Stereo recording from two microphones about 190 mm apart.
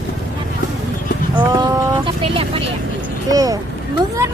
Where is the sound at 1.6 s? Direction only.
25° right (ahead or behind).